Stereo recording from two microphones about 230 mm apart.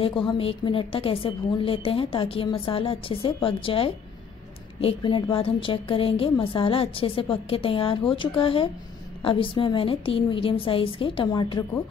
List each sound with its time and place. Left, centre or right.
0.0 s a woman's voice: left